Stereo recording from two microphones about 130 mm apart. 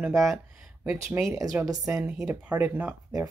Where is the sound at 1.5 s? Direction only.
15° right (ahead or behind).